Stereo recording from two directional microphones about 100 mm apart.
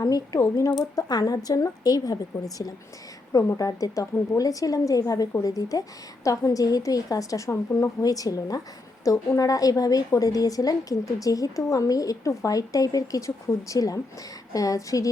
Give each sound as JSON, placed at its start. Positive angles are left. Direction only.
{"t": 0.3, "sound": "speech", "side_deg": 30}
{"t": 0.8, "sound": "a woman's voice", "side_deg": 45}